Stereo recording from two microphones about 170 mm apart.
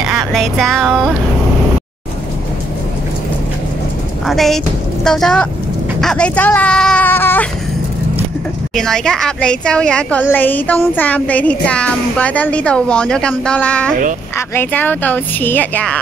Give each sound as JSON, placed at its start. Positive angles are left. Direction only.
{"t": 0.3, "sound": "speech", "side_deg": 0}
{"t": 4.3, "sound": "speech", "side_deg": 0}
{"t": 8.7, "sound": "speech", "side_deg": 5}
{"t": 10.3, "sound": "music", "side_deg": 10}